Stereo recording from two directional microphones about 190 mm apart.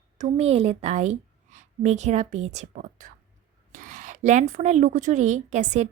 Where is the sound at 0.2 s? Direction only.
35° right (ahead or behind).